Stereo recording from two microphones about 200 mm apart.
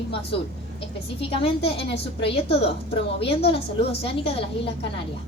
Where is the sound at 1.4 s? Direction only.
30° left (ahead or behind).